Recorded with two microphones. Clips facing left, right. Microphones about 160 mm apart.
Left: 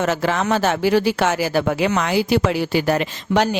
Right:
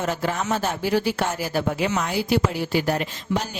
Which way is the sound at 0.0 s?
90° left.